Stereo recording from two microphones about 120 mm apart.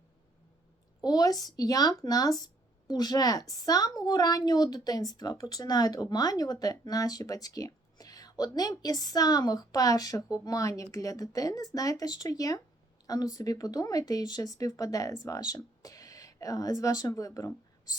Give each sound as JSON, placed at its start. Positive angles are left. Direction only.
{"t": 1.0, "sound": "a woman's voice", "side_deg": 30}